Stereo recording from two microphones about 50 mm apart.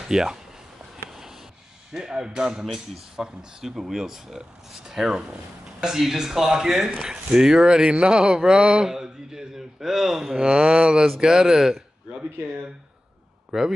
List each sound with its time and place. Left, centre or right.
0.1 s speech: centre
1.9 s speech: centre
10.3 s speech: centre
13.5 s speech: centre